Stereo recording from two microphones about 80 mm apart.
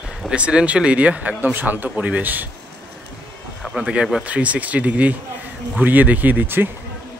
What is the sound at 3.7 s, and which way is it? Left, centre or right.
Speech, centre.